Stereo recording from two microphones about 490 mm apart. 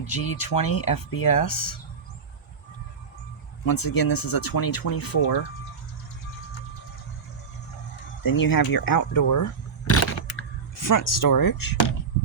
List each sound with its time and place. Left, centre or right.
0.0 s speech: left
3.7 s speech: left
8.2 s speech: left
9.9 s a sound: left
10.8 s speech: left